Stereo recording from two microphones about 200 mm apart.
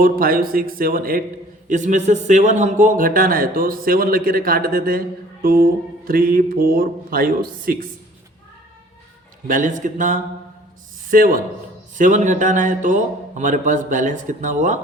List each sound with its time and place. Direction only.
0.0 s speech: 45° right (ahead or behind)
9.5 s a man's voice: 40° right (ahead or behind)